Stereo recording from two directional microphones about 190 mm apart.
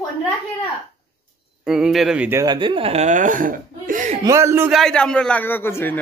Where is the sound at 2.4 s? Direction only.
25° right (ahead or behind); by 4.1 s 45° right (ahead or behind).